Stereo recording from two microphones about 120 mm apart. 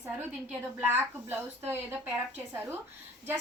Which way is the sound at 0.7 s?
15° right (ahead or behind).